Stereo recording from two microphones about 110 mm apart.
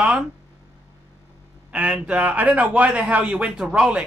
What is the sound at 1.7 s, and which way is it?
A man's voice, 10° right (ahead or behind).